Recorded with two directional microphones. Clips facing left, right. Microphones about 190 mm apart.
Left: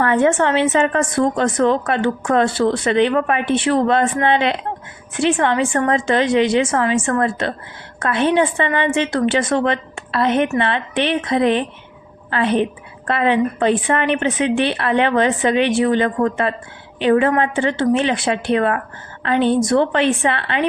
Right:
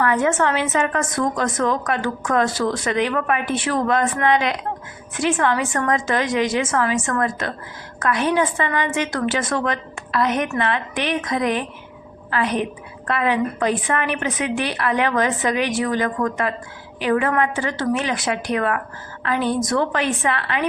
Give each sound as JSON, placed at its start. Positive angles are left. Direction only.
{"t": 0.0, "sound": "a woman's voice", "side_deg": 30}